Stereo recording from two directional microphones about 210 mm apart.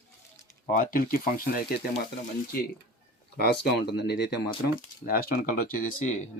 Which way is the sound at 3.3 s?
50° left (ahead or behind).